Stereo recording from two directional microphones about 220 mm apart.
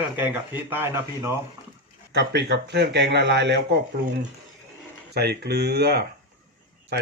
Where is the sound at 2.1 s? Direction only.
50° right (ahead or behind).